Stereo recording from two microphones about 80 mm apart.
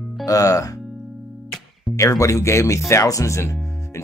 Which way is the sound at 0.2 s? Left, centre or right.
Left.